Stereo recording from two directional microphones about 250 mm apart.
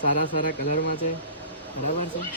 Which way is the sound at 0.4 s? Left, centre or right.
Left.